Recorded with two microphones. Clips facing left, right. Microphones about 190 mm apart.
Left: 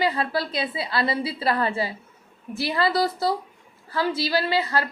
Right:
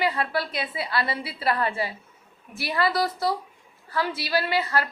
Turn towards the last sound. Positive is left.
turn(degrees=25)  # may be behind; listen again after turning